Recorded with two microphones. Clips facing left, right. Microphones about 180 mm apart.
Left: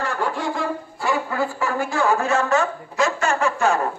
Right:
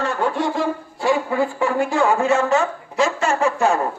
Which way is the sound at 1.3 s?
25° right (ahead or behind).